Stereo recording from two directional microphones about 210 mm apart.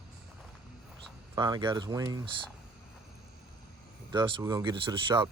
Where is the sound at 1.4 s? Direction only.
20° right (ahead or behind).